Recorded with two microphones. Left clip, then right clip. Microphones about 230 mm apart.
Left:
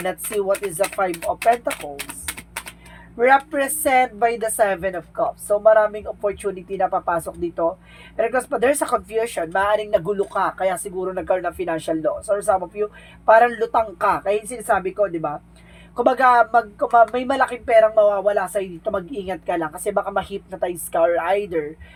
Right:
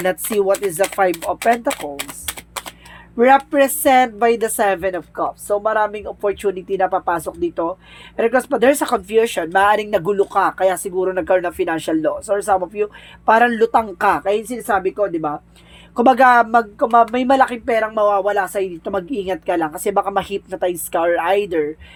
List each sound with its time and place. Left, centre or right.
0.0 s speech: right
3.2 s speech: right